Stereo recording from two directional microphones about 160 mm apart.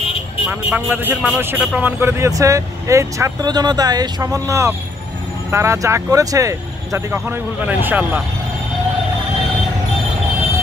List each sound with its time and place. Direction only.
0.5 s speech: 10° right (ahead or behind)